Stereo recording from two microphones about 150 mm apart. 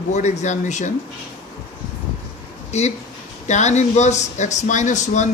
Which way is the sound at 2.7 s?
45° left (ahead or behind).